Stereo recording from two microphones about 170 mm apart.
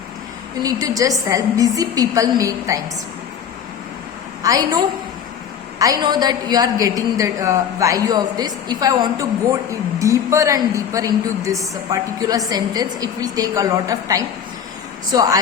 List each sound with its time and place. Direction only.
0.6 s a woman's voice: 20° right (ahead or behind)
4.4 s a woman's voice: 20° right (ahead or behind)
5.8 s a woman's voice: 25° right (ahead or behind)